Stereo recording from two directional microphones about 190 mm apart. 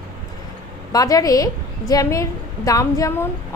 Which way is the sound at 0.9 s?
20° left (ahead or behind).